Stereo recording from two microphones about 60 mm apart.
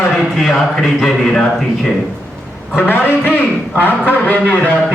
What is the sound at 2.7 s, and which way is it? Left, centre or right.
A man's voice, left.